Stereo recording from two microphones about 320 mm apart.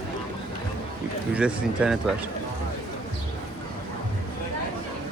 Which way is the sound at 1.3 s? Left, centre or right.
Centre.